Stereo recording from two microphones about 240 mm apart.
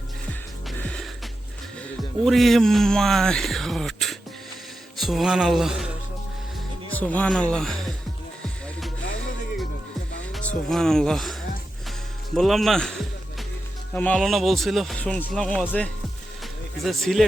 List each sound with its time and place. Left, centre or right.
0.8 s music: centre
2.2 s speech: centre
6.9 s speech: centre
10.3 s speech: centre